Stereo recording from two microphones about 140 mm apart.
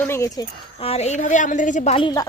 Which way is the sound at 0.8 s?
50° left (ahead or behind).